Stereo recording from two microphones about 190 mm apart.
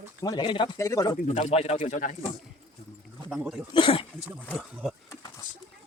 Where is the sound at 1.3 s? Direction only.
35° left (ahead or behind).